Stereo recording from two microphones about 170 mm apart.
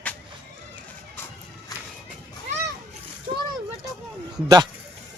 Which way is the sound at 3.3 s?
35° right (ahead or behind).